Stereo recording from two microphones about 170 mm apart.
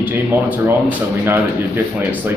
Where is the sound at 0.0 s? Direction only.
10° right (ahead or behind).